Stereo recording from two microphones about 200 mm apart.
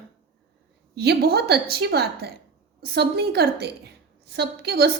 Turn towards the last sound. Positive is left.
turn(degrees=-55)  # may be behind; listen again after turning